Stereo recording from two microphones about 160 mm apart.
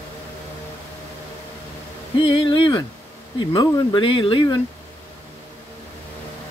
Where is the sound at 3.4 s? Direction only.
30° left (ahead or behind).